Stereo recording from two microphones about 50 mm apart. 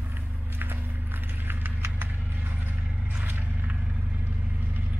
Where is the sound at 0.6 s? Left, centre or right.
Right.